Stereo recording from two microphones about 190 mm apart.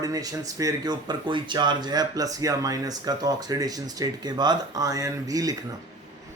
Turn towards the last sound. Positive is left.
turn(degrees=-20)  # may be behind; listen again after turning